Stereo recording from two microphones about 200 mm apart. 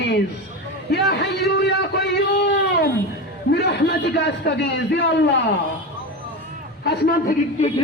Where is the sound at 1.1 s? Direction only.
55° left (ahead or behind).